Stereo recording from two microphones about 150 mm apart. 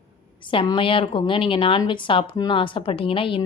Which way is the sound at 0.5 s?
35° left (ahead or behind).